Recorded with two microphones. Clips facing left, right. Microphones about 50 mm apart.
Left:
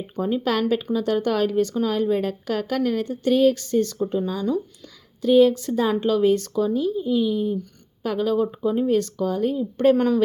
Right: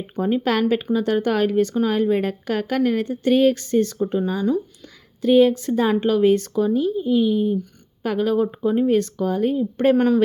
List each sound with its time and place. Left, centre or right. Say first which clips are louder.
0.2 s speech: right 2 dB; right